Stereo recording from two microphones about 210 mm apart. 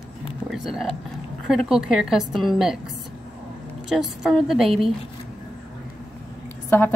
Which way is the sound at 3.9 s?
Centre (ahead or behind).